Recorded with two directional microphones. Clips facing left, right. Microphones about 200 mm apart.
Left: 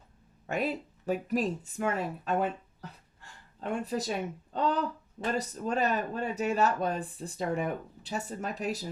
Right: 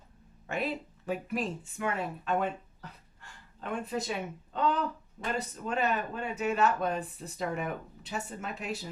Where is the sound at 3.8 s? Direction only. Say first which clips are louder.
Left 2 dB; 35° left (ahead or behind).